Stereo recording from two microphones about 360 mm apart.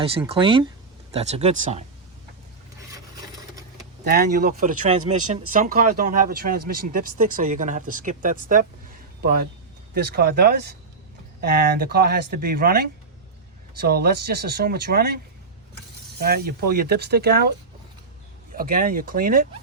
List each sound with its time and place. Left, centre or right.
0.0 s speech: centre
4.0 s speech: right
9.9 s speech: right
16.1 s speech: right
18.5 s speech: right